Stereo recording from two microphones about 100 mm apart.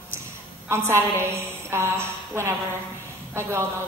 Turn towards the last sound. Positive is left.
turn(degrees=-25)  # may be behind; listen again after turning